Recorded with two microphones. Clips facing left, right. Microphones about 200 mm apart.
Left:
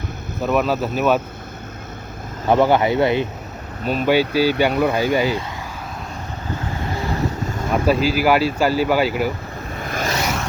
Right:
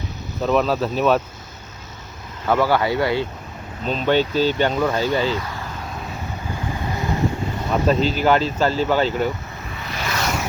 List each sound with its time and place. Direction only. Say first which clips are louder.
0.4 s speech: even; 5° left (ahead or behind)
2.5 s speech: left 3 dB; 20° left (ahead or behind)
3.8 s speech: left 2 dB; 10° left (ahead or behind)
7.7 s speech: left 1 dB; 10° left (ahead or behind)
9.8 s vehicle: left 5 dB; 50° left (ahead or behind)